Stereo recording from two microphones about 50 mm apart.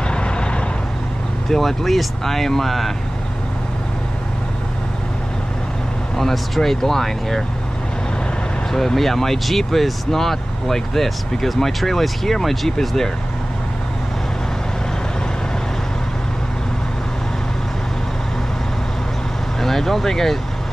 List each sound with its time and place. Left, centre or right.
0.1 s vehicle: centre
1.5 s speech: centre
6.1 s speech: centre
8.7 s speech: centre
19.6 s speech: centre